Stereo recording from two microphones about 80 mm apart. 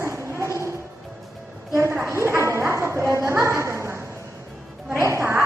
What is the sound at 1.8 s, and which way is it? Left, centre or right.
A woman's voice, right.